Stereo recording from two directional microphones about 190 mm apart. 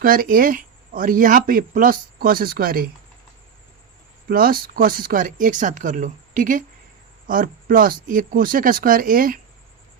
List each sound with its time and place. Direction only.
0.0 s speech: 50° right (ahead or behind)
4.3 s speech: 50° right (ahead or behind)